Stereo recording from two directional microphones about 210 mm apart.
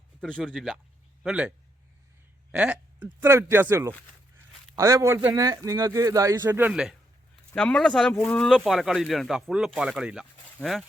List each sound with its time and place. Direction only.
0.2 s speech: 5° left (ahead or behind)
8.1 s speech: 10° left (ahead or behind)
8.4 s speech: centre (ahead or behind)